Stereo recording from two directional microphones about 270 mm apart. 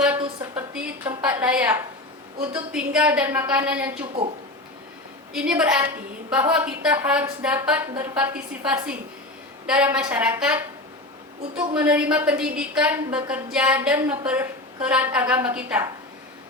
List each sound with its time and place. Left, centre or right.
0.7 s a sound: centre
2.7 s a woman's voice: centre
4.0 s speech: right
5.3 s a woman's voice: centre
11.7 s a woman's voice: centre